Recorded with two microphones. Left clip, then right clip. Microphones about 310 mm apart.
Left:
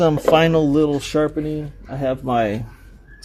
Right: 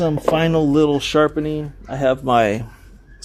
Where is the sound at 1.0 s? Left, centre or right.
Centre.